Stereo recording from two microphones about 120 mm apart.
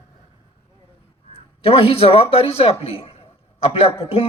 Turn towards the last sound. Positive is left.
turn(degrees=55)  # may be behind; listen again after turning